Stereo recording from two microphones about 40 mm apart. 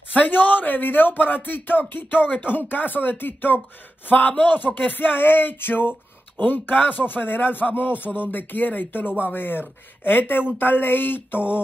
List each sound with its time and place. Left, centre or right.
0.1 s speech: left
6.3 s a man's voice: left